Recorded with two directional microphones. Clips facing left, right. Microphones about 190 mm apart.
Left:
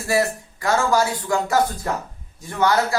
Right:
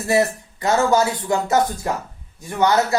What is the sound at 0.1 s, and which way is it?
Speech, 20° right (ahead or behind).